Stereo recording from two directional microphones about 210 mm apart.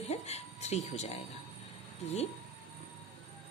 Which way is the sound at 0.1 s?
30° left (ahead or behind).